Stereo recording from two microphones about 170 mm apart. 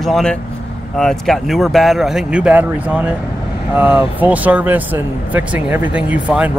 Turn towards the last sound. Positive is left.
turn(degrees=-5)  # may be behind; listen again after turning